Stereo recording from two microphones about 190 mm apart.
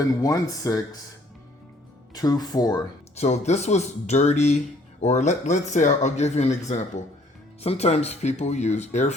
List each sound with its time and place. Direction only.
0.2 s speech: 20° left (ahead or behind)
2.1 s speech: 20° left (ahead or behind)
3.2 s speech: 35° left (ahead or behind)